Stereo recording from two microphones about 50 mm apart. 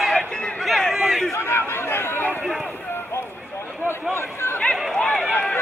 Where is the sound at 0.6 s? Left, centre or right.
Centre.